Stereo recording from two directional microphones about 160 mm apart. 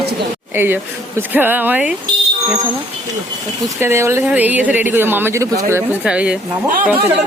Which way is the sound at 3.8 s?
15° right (ahead or behind).